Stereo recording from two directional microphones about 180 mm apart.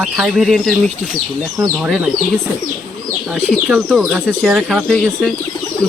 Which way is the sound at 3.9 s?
Centre (ahead or behind).